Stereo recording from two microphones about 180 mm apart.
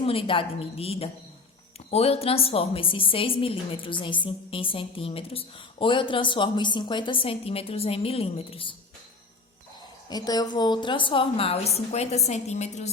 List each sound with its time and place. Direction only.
0.0 s a woman's voice: 30° left (ahead or behind)
10.1 s a woman's voice: 20° left (ahead or behind); by 12.9 s 40° left (ahead or behind)